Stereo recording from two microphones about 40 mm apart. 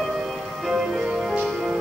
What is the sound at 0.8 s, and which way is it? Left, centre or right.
Music, centre.